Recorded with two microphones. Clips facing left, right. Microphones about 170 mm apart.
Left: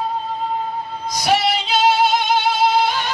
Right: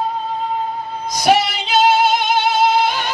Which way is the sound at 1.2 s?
50° right (ahead or behind).